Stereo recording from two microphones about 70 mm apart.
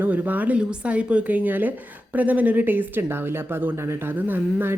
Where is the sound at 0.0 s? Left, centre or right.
Right.